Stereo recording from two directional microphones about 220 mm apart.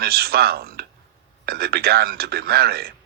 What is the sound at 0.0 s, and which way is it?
A man's voice, 45° right (ahead or behind).